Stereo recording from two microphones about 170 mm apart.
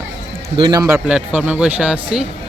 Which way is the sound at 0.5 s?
25° right (ahead or behind).